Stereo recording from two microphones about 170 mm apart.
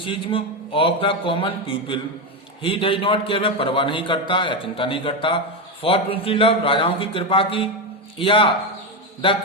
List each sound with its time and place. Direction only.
0.0 s a man's voice: 30° left (ahead or behind)